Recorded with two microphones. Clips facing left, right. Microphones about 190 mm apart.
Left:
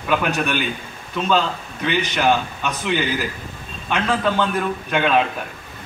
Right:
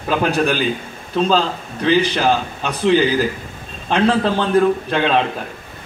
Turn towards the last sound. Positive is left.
turn(degrees=-30)  # may be behind; listen again after turning